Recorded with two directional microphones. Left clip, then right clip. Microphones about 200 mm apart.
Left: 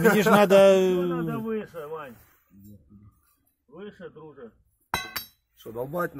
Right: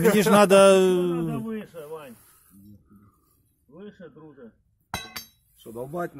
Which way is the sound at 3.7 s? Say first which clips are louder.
Left 3 dB; 15° left (ahead or behind).